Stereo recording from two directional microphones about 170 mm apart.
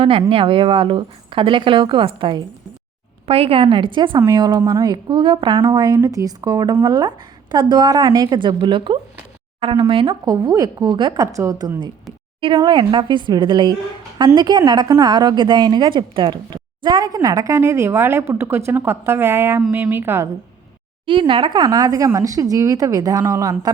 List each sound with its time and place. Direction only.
0.0 s a woman's voice: 35° right (ahead or behind); by 20.3 s 15° right (ahead or behind)
21.1 s a woman's voice: 30° right (ahead or behind)